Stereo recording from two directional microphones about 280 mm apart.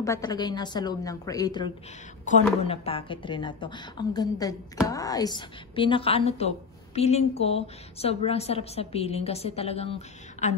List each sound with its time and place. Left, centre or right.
0.0 s a woman's voice: centre
2.3 s a woman's voice: left